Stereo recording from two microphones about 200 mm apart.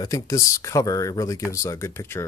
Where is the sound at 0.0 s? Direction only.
15° left (ahead or behind).